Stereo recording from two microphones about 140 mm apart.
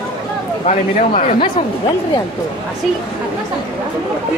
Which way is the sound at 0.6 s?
55° left (ahead or behind).